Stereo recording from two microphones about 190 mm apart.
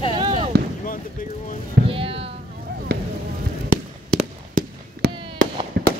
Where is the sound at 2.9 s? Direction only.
60° right (ahead or behind).